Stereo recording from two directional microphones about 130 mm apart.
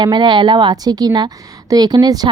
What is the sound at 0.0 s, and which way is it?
A woman's voice, 35° right (ahead or behind).